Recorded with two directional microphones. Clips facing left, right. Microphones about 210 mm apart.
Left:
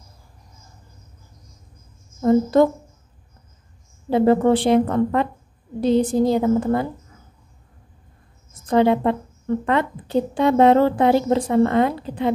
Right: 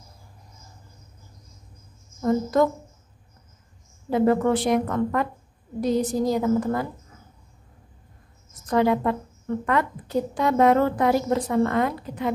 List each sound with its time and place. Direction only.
2.2 s a woman's voice: 30° left (ahead or behind)
4.1 s a woman's voice: 30° left (ahead or behind)
8.6 s a woman's voice: 25° left (ahead or behind)